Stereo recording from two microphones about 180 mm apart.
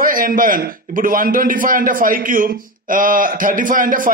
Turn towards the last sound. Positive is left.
turn(degrees=-50)  # may be behind; listen again after turning